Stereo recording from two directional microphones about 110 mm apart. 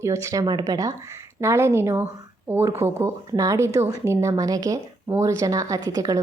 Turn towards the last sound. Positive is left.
turn(degrees=-35)  # may be behind; listen again after turning